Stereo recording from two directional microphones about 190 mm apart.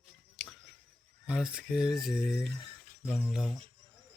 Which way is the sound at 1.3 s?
5° right (ahead or behind).